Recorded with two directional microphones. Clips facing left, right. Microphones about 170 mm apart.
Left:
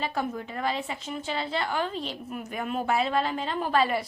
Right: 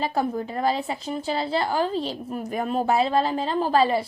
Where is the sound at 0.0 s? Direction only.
35° right (ahead or behind).